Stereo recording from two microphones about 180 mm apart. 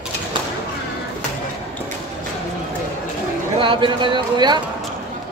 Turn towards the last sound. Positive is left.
turn(degrees=-25)  # may be behind; listen again after turning